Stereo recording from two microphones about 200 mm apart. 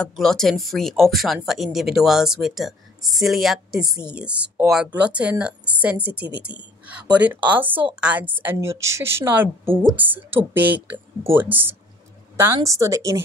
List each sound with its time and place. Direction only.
0.1 s a woman's voice: centre (ahead or behind); by 13.2 s 15° right (ahead or behind)